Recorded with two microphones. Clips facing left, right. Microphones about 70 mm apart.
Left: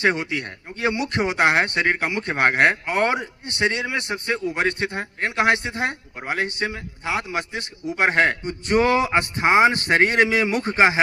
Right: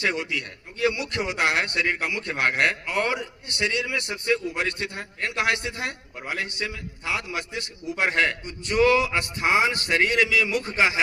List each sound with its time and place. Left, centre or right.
0.0 s a man's voice: left